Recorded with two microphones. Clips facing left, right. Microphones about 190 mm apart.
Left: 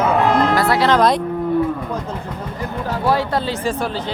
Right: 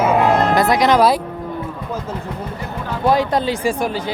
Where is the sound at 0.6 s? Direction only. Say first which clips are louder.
Right 1 dB; 15° right (ahead or behind).